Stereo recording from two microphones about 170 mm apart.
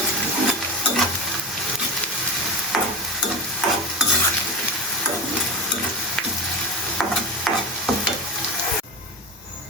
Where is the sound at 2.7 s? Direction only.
Centre (ahead or behind).